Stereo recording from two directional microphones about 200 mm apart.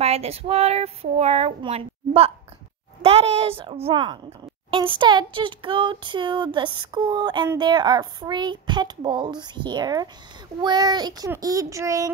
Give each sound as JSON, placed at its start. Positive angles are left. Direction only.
{"t": 0.0, "sound": "child singing", "side_deg": -30}
{"t": 3.0, "sound": "a sound", "side_deg": -30}
{"t": 10.6, "sound": "child singing", "side_deg": -20}